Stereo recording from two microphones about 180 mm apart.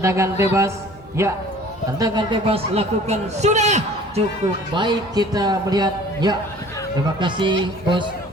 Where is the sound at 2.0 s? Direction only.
30° right (ahead or behind).